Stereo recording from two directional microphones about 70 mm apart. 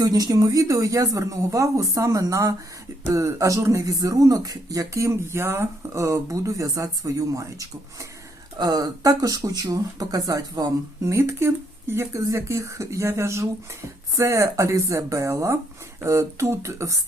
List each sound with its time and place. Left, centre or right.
0.0 s speech: right
8.5 s speech: right
11.0 s speech: right